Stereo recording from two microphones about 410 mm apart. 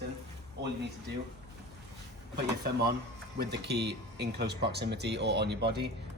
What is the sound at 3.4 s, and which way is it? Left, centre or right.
A man's voice, right.